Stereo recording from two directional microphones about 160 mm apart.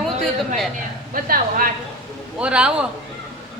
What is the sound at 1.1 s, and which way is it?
Speech, 65° right (ahead or behind).